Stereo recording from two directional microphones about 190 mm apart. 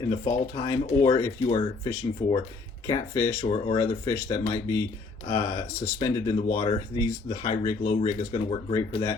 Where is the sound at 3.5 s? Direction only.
25° left (ahead or behind).